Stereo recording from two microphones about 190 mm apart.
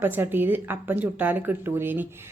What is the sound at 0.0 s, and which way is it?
A woman's voice, 10° right (ahead or behind).